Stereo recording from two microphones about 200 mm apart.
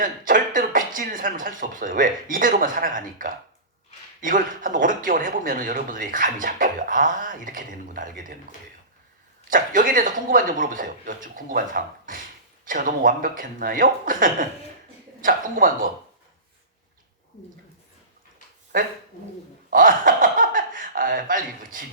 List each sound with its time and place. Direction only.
0.0 s speech: 40° right (ahead or behind)
9.5 s speech: 40° right (ahead or behind)
19.7 s speech: 45° right (ahead or behind)